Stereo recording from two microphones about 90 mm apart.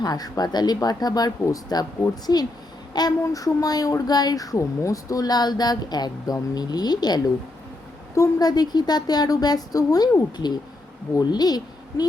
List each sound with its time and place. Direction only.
0.0 s a woman's voice: 45° left (ahead or behind)